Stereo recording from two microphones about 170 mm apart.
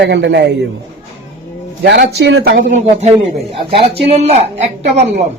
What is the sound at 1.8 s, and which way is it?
Speech, 75° right (ahead or behind).